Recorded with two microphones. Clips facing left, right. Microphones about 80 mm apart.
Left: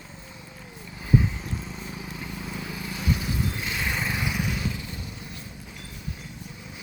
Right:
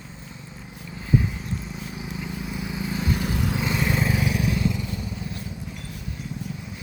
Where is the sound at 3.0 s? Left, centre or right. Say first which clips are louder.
Even; right.